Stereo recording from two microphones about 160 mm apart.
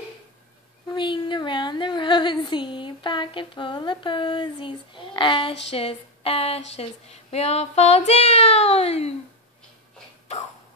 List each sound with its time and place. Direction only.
0.8 s speech: 30° left (ahead or behind)